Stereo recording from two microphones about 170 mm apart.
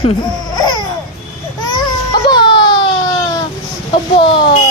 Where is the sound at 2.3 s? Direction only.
30° left (ahead or behind).